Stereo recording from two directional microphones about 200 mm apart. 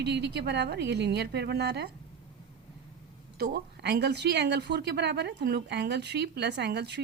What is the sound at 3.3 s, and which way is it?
Speech, 50° right (ahead or behind).